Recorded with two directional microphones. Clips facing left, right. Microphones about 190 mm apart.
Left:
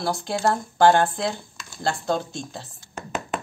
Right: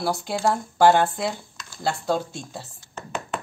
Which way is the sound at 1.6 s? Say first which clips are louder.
Even; 5° right (ahead or behind).